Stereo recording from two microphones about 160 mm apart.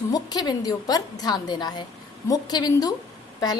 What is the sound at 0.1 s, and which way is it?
A woman's voice, 25° left (ahead or behind).